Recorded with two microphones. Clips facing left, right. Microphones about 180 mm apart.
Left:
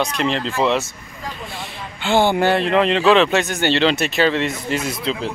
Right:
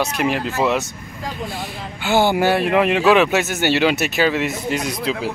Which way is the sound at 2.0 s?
5° right (ahead or behind).